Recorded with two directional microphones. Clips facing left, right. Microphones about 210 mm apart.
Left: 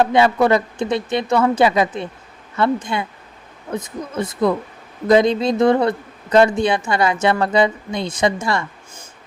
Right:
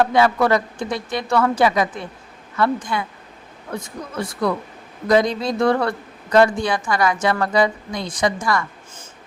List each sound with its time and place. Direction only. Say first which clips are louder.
0.0 s a woman's voice: left 2 dB; 25° left (ahead or behind)